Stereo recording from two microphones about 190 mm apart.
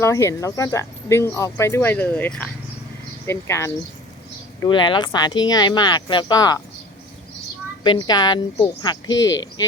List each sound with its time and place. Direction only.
0.0 s speech: 15° left (ahead or behind)
4.6 s speech: 25° left (ahead or behind)
7.9 s speech: 25° left (ahead or behind)